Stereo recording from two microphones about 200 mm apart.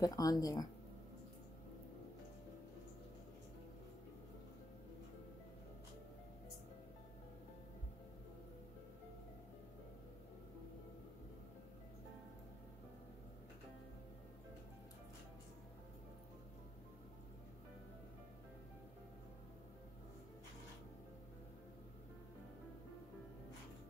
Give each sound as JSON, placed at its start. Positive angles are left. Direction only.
{"t": 0.0, "sound": "speech", "side_deg": 20}